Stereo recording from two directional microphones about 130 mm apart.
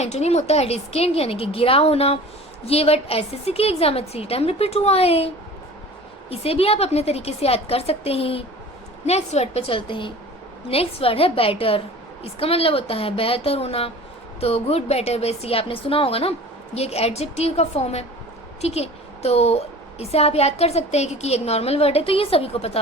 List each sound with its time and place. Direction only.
0.0 s a woman's voice: 55° left (ahead or behind)
6.3 s a woman's voice: 50° left (ahead or behind)